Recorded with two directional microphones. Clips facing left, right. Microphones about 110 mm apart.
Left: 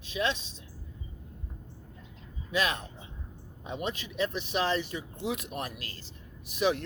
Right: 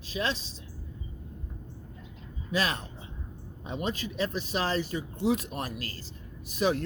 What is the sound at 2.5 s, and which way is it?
A man's voice, 35° right (ahead or behind).